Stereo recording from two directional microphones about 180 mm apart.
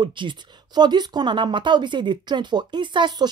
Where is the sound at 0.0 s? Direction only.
25° right (ahead or behind).